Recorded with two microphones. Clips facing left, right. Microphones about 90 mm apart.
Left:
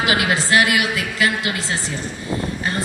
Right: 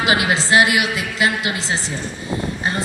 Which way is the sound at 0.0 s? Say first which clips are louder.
Right 1 dB; 25° right (ahead or behind).